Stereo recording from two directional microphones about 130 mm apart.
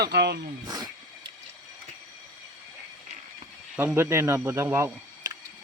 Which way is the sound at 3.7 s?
15° right (ahead or behind).